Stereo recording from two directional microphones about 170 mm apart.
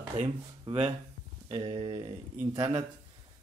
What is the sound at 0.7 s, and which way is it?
Speech, 35° right (ahead or behind).